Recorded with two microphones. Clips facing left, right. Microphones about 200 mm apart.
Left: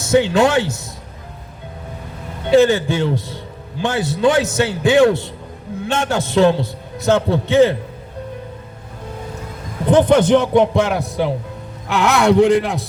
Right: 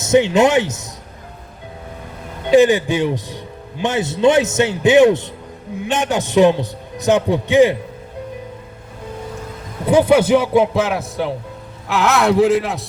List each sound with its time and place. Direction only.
0.0 s speech: 20° right (ahead or behind)
2.4 s a man's voice: 15° right (ahead or behind)
9.8 s a man's voice: 10° right (ahead or behind)